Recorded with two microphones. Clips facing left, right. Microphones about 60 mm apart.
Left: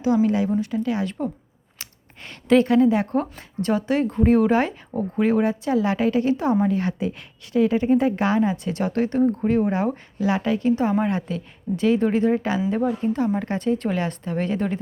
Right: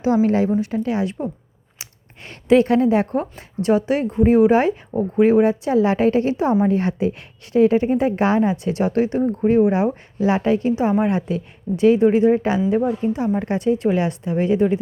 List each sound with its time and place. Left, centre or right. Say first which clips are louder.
0.0 s a woman's voice: right 3 dB; right
1.8 s a sound: right 1 dB; right
3.3 s speech: right 5 dB; centre
10.2 s a woman's voice: right 5 dB; right; by 14.8 s centre